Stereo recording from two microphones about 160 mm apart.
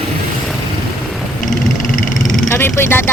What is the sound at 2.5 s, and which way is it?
Vehicle, 15° left (ahead or behind).